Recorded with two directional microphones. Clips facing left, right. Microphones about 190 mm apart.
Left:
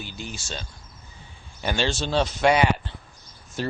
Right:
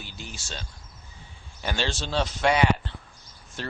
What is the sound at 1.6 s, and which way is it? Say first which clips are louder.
Speech: left 4 dB; 15° left (ahead or behind).